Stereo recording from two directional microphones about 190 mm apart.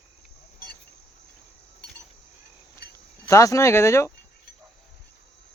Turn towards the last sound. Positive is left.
turn(degrees=15)  # may be behind; listen again after turning